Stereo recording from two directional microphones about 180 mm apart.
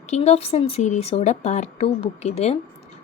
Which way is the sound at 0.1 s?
35° left (ahead or behind).